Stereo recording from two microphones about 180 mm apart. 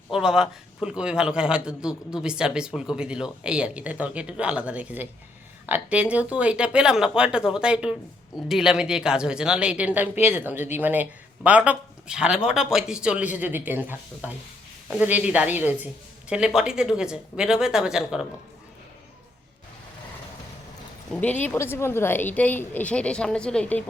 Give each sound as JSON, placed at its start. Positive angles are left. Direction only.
{"t": 0.1, "sound": "a man's voice", "side_deg": -5}
{"t": 21.2, "sound": "a woman's voice", "side_deg": 10}